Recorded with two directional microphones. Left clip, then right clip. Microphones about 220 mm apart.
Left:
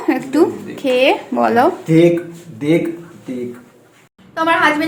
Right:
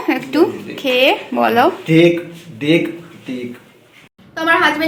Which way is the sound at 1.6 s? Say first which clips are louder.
Even; 5° right (ahead or behind).